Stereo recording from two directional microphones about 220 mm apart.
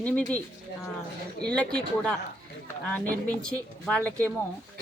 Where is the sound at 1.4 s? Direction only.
5° left (ahead or behind).